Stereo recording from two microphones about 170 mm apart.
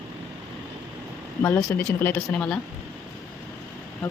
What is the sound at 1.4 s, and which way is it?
Speech, 20° left (ahead or behind).